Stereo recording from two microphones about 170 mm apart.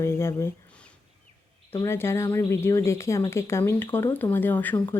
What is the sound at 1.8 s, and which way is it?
Speech, 15° left (ahead or behind).